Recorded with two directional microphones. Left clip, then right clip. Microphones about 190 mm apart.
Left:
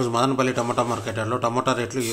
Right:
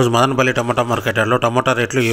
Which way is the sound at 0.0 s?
30° right (ahead or behind).